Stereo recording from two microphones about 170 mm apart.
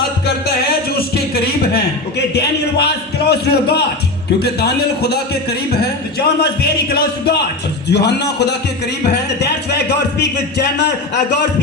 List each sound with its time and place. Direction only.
0.9 s a man's voice: 70° left (ahead or behind)
7.9 s a man's voice: 80° left